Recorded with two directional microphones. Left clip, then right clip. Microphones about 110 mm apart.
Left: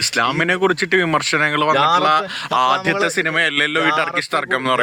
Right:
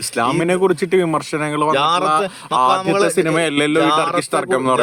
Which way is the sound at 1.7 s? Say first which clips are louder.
Left 1 dB; 35° right (ahead or behind).